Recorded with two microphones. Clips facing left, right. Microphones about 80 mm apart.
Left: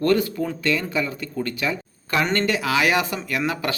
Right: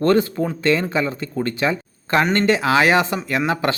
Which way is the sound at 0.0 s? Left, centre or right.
Right.